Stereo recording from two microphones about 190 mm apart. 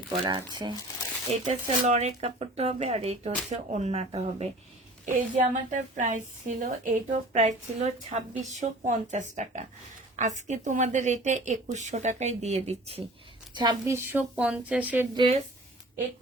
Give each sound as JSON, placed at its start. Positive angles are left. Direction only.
{"t": 0.1, "sound": "speech", "side_deg": -20}
{"t": 1.3, "sound": "speech", "side_deg": -35}
{"t": 5.0, "sound": "speech", "side_deg": -40}
{"t": 13.5, "sound": "speech", "side_deg": -20}
{"t": 15.1, "sound": "speech", "side_deg": -25}